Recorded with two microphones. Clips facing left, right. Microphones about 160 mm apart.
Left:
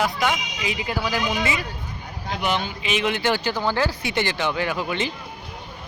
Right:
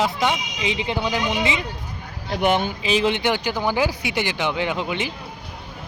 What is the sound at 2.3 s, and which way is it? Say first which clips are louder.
Speech: right 5 dB; 55° right (ahead or behind).